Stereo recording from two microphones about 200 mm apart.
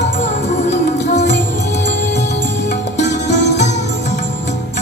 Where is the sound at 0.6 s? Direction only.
35° left (ahead or behind).